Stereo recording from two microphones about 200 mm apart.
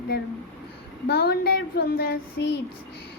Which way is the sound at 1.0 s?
50° left (ahead or behind).